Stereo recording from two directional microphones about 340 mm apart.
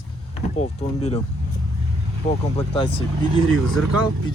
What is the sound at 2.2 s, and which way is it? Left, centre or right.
Speech, left.